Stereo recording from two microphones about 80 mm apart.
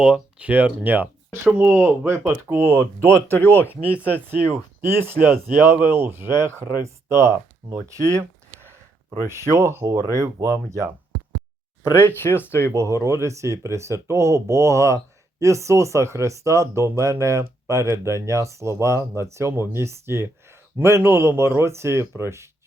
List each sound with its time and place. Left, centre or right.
0.0 s speech: centre; by 3.2 s right
3.2 s speech: left
3.8 s speech: centre; by 8.2 s right
9.2 s speech: right
11.8 s speech: left
12.7 s speech: right